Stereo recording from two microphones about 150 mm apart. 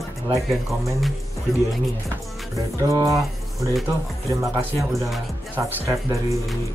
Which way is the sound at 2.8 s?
20° right (ahead or behind).